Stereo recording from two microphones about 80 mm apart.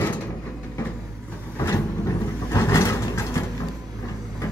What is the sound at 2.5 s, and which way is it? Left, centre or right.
Vehicle, left.